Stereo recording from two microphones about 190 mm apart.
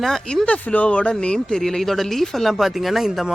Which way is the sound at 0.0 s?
Centre (ahead or behind).